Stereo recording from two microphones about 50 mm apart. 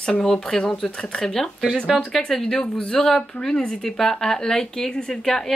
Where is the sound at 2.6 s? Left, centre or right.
Centre.